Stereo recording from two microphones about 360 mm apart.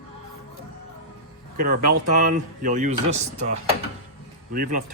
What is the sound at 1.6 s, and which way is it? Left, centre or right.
Speech, right.